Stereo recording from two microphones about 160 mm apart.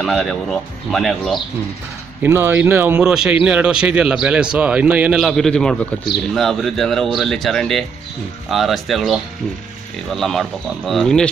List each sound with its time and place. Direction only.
0.0 s speech: centre (ahead or behind)
2.2 s speech: 15° right (ahead or behind); by 11.2 s 5° left (ahead or behind)